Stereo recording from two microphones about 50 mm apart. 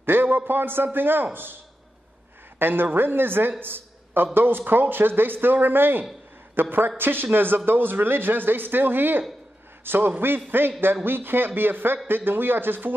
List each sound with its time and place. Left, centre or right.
0.0 s a sound: right
0.5 s a man's voice: right
2.6 s a man's voice: right